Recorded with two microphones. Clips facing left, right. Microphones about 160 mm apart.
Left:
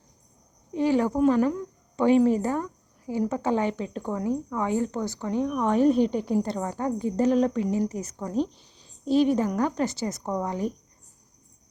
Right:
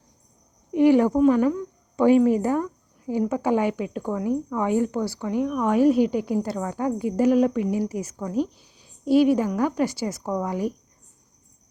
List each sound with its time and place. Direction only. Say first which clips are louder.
0.7 s a woman's voice: right 6 dB; 15° right (ahead or behind)